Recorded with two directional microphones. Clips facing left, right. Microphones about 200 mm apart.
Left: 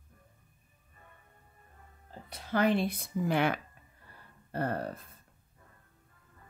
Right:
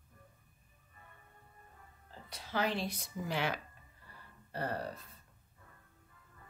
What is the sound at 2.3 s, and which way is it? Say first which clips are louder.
Speech: left 7 dB; 55° left (ahead or behind).